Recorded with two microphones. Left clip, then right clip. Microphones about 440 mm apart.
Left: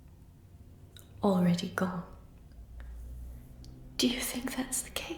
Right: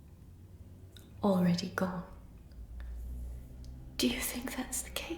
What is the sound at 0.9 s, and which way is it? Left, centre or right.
Speech, centre.